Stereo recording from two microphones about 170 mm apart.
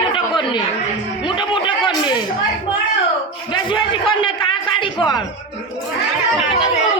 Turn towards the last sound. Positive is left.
turn(degrees=30)  # may be behind; listen again after turning